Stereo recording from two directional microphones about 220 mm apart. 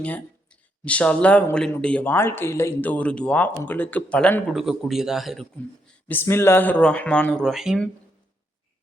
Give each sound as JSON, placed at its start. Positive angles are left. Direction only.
{"t": 0.0, "sound": "speech", "side_deg": 5}
{"t": 6.1, "sound": "speech", "side_deg": 10}